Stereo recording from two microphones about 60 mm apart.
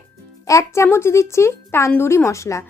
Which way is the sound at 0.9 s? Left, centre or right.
Left.